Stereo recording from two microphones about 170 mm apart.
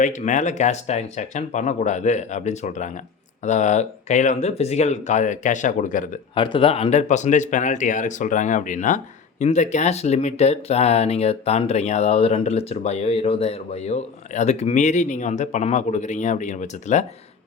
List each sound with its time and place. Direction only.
0.0 s speech: 45° left (ahead or behind)
6.3 s speech: 30° left (ahead or behind)